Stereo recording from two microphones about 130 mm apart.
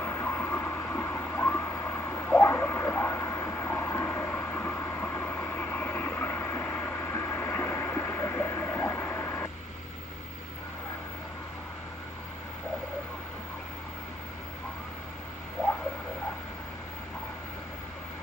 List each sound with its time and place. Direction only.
0.0 s vehicle: 20° left (ahead or behind)